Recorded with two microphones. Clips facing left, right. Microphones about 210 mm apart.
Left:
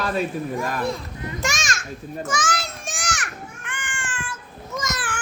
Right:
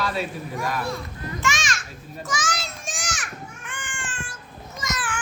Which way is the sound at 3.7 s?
65° left (ahead or behind).